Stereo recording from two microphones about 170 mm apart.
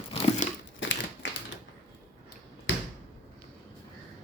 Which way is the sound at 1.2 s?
90° left.